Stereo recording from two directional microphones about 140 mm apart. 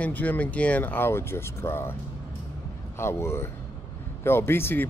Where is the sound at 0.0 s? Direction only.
10° left (ahead or behind).